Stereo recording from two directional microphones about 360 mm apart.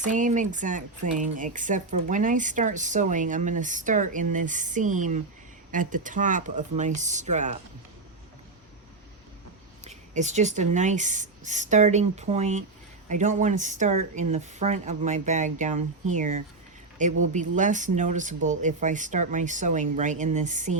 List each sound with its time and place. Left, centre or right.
0.0 s speech: right
9.8 s speech: centre